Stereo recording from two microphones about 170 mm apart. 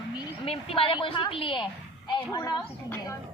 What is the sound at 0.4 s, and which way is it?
A woman's voice, 35° left (ahead or behind).